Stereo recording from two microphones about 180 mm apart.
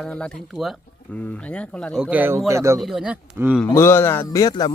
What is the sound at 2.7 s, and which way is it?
Speech, centre (ahead or behind).